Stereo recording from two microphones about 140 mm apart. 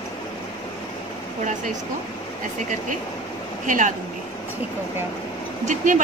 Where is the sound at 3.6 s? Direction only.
65° right (ahead or behind).